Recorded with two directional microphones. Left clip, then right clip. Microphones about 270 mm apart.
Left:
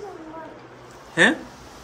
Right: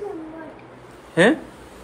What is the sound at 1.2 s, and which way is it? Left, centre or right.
Speech, centre.